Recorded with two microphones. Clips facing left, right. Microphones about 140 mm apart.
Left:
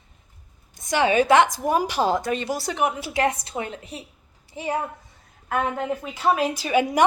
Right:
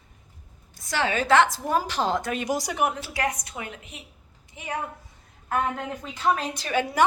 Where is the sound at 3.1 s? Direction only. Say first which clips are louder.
Left 5 dB; 30° left (ahead or behind).